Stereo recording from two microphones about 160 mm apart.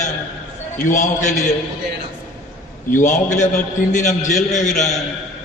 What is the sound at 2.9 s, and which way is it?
A man's voice, 50° left (ahead or behind).